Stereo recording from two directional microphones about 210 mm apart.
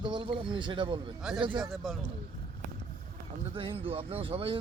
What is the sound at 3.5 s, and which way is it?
Speech, 25° right (ahead or behind).